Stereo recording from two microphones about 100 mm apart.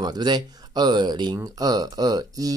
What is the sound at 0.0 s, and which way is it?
Speech, 45° right (ahead or behind).